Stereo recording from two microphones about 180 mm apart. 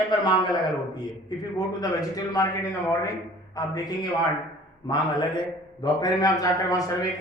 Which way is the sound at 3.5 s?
20° left (ahead or behind).